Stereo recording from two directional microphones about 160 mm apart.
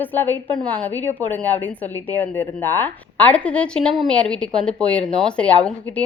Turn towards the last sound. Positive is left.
turn(degrees=5)  # may be behind; listen again after turning